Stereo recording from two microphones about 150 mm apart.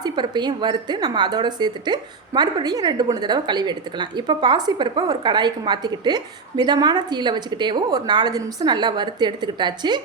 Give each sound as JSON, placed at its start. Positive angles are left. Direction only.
{"t": 0.0, "sound": "a woman's voice", "side_deg": -30}